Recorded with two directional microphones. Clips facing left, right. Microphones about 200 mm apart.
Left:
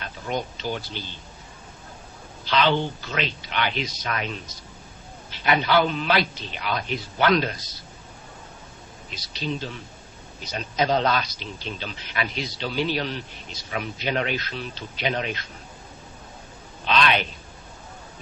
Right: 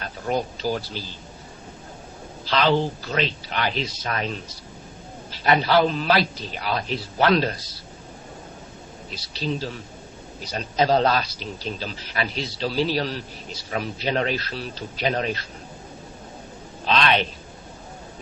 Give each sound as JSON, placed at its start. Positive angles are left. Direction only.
{"t": 0.0, "sound": "speech", "side_deg": -35}
{"t": 2.4, "sound": "a man's voice", "side_deg": -35}
{"t": 5.3, "sound": "a man's voice", "side_deg": -35}
{"t": 9.0, "sound": "a man's voice", "side_deg": -35}